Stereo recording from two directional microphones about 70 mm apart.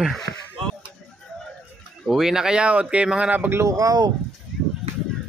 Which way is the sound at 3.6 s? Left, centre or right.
Right.